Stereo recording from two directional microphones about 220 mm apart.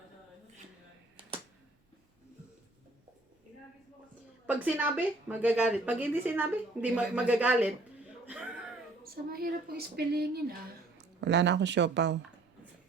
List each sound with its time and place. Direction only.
4.4 s speech: 5° right (ahead or behind)
9.3 s speech: 45° right (ahead or behind)